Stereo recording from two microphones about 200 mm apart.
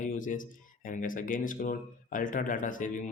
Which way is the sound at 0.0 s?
40° left (ahead or behind).